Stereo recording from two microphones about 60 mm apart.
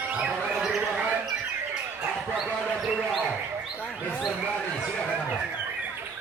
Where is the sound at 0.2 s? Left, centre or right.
Centre.